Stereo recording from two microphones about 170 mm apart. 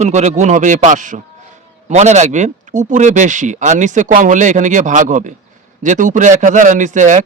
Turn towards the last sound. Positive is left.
turn(degrees=-45)  # may be behind; listen again after turning